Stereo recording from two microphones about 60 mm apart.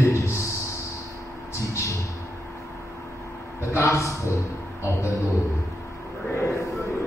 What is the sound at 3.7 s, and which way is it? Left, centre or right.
Speech, left.